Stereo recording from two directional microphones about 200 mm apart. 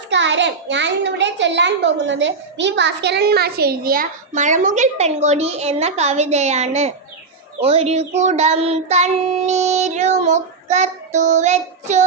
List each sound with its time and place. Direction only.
0.1 s a child's voice: 65° right (ahead or behind); by 6.9 s 35° right (ahead or behind)
7.6 s child singing: 30° right (ahead or behind)